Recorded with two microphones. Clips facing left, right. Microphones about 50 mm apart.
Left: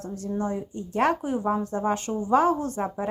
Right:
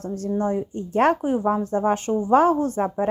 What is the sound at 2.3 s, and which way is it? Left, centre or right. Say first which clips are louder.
Speech: right 4 dB; right.